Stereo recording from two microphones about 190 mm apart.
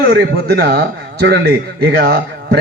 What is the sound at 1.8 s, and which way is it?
Speech, 55° right (ahead or behind).